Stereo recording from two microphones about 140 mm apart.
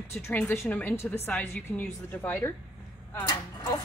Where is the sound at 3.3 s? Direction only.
30° left (ahead or behind).